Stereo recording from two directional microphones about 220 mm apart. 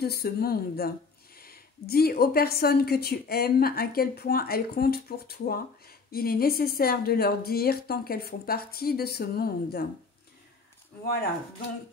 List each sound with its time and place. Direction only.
0.0 s a woman's voice: 45° left (ahead or behind)